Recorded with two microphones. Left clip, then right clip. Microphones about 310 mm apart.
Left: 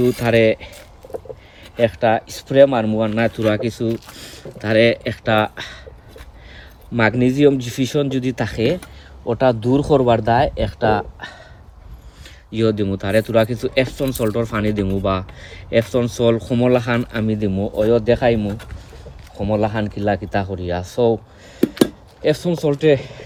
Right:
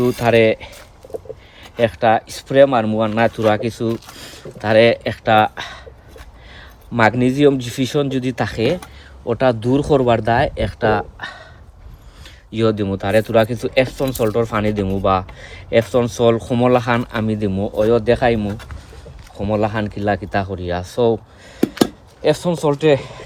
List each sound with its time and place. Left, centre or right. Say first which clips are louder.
0.0 s speech: right 1 dB; centre
9.3 s speech: even; right
12.2 s speech: right 1 dB; centre
22.2 s speech: right 2 dB; centre